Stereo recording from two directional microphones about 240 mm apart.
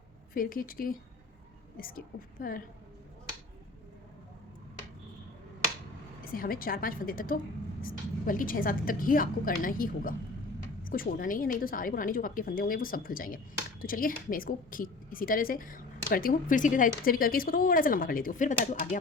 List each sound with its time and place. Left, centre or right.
0.3 s a woman's voice: left
6.2 s a woman's voice: left